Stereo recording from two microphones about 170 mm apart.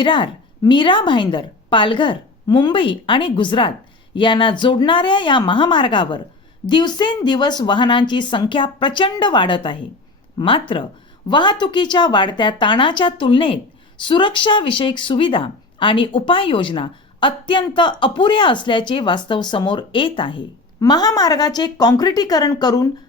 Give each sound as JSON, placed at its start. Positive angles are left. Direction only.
{"t": 0.0, "sound": "speech", "side_deg": 30}